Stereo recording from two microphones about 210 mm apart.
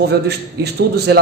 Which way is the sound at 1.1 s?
50° right (ahead or behind).